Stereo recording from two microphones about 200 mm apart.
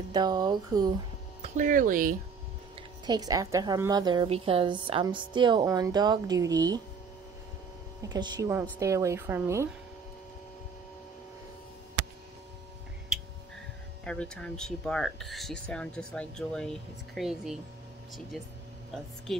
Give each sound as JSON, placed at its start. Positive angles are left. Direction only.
{"t": 0.1, "sound": "a woman's voice", "side_deg": -20}
{"t": 1.4, "sound": "speech", "side_deg": -40}
{"t": 3.1, "sound": "a woman's voice", "side_deg": -20}
{"t": 8.0, "sound": "a woman's voice", "side_deg": -20}
{"t": 14.0, "sound": "speech", "side_deg": 5}